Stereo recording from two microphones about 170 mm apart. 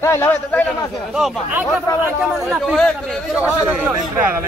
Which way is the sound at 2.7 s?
5° left (ahead or behind).